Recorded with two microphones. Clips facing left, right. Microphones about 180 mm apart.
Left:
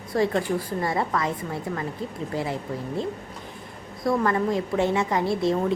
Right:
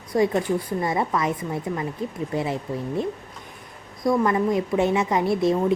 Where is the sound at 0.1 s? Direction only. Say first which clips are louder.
Right 2 dB; 20° right (ahead or behind).